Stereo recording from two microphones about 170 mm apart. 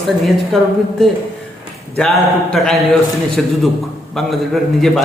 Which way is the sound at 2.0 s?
5° left (ahead or behind).